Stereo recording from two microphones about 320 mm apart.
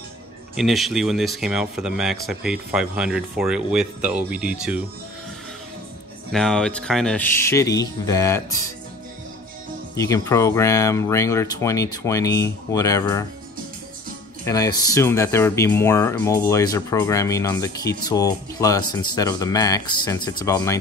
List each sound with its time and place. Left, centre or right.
0.6 s speech: centre
6.3 s speech: centre
9.9 s speech: centre
14.4 s speech: centre